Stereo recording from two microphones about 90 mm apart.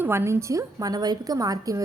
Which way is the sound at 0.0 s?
25° right (ahead or behind).